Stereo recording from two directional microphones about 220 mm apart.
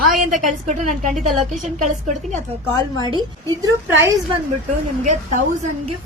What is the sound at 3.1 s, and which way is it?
Speech, 20° right (ahead or behind).